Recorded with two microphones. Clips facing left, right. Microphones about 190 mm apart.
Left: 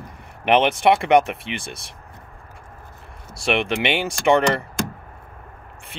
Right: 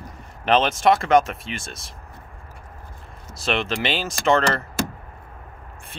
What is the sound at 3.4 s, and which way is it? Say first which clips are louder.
Speech: left 3 dB; 15° left (ahead or behind).